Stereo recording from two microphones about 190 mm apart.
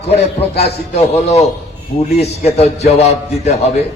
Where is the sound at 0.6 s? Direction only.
35° left (ahead or behind).